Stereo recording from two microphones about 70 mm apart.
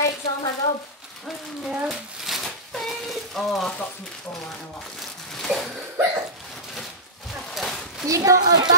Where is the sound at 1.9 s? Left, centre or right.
Centre.